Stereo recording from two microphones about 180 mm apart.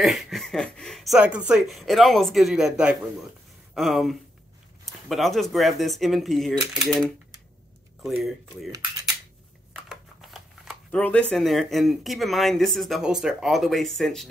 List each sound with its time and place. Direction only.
0.0 s speech: centre (ahead or behind)
8.0 s speech: centre (ahead or behind)
9.8 s speech: centre (ahead or behind)